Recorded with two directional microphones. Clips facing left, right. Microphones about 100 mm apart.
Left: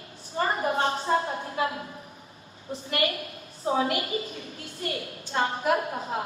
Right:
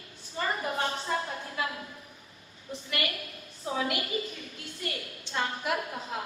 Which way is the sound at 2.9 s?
35° left (ahead or behind).